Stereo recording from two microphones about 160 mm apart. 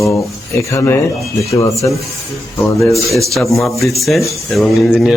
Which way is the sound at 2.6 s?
15° left (ahead or behind).